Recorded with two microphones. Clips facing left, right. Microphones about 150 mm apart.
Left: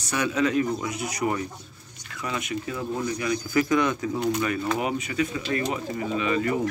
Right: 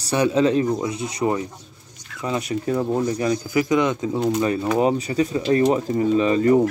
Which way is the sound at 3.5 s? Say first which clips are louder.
Right 2 dB; 20° right (ahead or behind).